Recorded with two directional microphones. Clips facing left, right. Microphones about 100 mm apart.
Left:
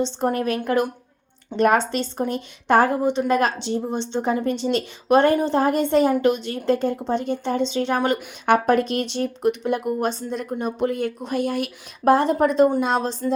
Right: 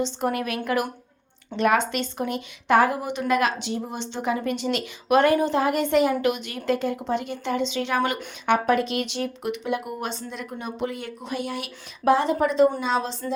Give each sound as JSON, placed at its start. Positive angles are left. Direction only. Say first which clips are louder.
{"t": 0.2, "sound": "speech", "louder": "left 4 dB", "side_deg": 35}
{"t": 1.5, "sound": "speech", "louder": "left 3 dB", "side_deg": 40}